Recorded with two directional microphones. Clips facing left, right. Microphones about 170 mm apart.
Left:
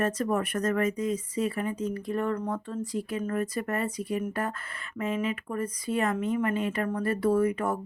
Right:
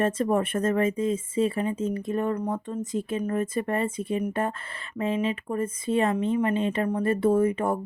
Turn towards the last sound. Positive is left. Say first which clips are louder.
# right 3 dB
turn(degrees=-25)  # may be behind; listen again after turning